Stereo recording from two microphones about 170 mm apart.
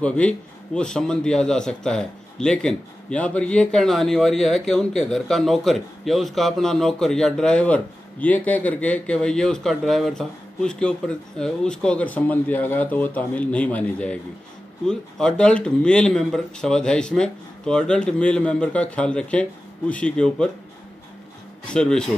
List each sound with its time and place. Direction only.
0.0 s a man's voice: 5° left (ahead or behind)
21.6 s a man's voice: 5° left (ahead or behind)